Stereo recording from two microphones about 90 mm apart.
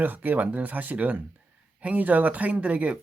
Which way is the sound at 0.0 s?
20° right (ahead or behind).